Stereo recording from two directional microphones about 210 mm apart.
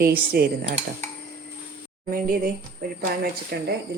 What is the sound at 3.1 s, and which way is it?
Cutlery, 45° right (ahead or behind).